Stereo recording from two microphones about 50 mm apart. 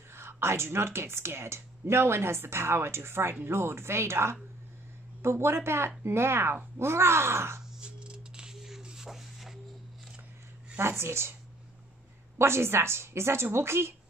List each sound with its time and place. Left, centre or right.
0.1 s speech: right
7.8 s a sound: centre
10.8 s speech: right
12.4 s speech: right